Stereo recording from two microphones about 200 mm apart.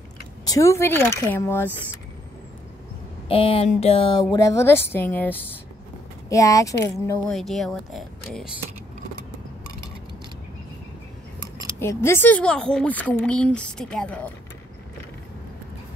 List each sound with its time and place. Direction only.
0.5 s speech: 15° left (ahead or behind)
3.3 s speech: 25° left (ahead or behind)
7.2 s speech: centre (ahead or behind)
11.8 s speech: 15° left (ahead or behind)